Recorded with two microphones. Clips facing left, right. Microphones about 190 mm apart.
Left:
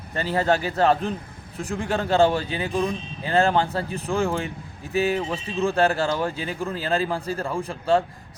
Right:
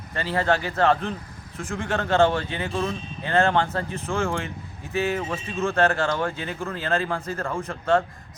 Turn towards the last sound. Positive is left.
turn(degrees=15)  # may be behind; listen again after turning